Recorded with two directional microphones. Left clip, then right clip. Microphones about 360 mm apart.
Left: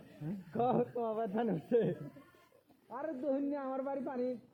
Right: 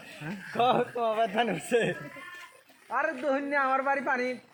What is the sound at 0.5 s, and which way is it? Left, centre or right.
A man's voice, centre.